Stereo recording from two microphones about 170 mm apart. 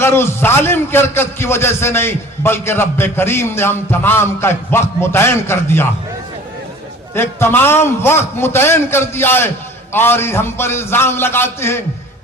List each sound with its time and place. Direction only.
0.0 s a man's voice: 15° left (ahead or behind)
7.1 s a man's voice: 15° left (ahead or behind)